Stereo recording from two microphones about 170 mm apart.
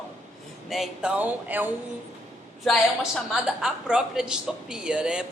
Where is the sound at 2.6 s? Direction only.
Centre (ahead or behind).